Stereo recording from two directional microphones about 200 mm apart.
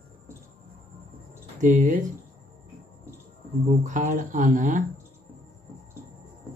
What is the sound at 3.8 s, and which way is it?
Speech, 40° right (ahead or behind).